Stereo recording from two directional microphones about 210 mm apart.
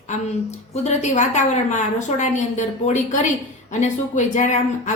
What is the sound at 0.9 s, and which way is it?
A woman's voice, 35° left (ahead or behind).